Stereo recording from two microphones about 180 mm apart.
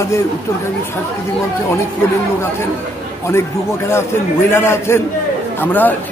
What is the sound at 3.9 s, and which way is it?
A man's voice, 15° left (ahead or behind).